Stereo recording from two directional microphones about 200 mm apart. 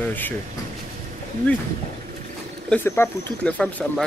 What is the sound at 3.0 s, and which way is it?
Speech, 10° left (ahead or behind).